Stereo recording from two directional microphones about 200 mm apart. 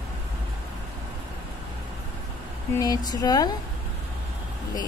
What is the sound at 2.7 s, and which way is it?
Speech, 20° left (ahead or behind).